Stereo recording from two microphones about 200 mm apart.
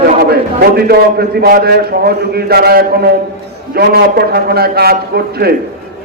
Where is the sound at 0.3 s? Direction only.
50° right (ahead or behind).